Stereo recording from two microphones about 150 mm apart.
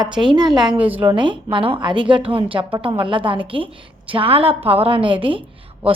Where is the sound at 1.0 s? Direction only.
35° right (ahead or behind).